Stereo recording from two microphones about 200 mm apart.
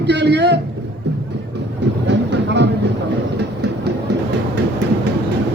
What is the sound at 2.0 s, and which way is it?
Music, 60° right (ahead or behind).